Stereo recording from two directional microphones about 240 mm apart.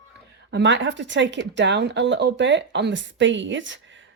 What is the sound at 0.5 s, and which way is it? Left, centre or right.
Speech, right.